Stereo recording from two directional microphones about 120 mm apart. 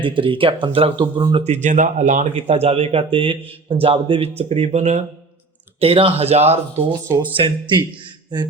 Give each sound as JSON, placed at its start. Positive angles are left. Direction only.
{"t": 0.0, "sound": "speech", "side_deg": -45}
{"t": 1.5, "sound": "speech", "side_deg": -80}
{"t": 5.8, "sound": "speech", "side_deg": -50}
{"t": 7.3, "sound": "speech", "side_deg": -45}